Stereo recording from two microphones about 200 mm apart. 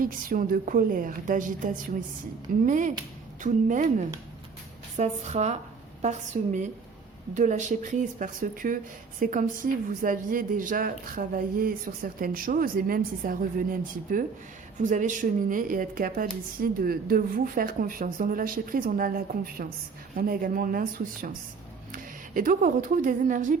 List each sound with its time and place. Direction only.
0.0 s a woman's voice: 45° right (ahead or behind)